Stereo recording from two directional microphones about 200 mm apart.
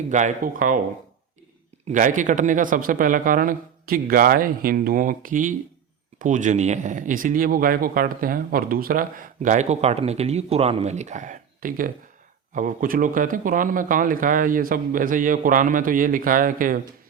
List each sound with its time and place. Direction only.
0.1 s speech: 40° right (ahead or behind)
1.9 s speech: 40° right (ahead or behind)